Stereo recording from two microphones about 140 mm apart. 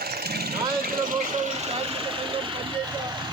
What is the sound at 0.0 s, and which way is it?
Vehicle, 90° right.